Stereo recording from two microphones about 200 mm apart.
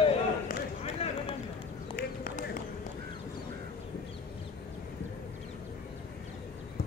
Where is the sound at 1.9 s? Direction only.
45° left (ahead or behind).